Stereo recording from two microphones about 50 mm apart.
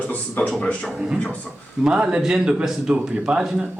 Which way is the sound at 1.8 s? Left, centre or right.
Centre.